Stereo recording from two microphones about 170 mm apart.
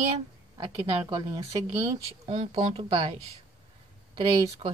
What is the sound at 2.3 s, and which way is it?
Speech, 35° right (ahead or behind).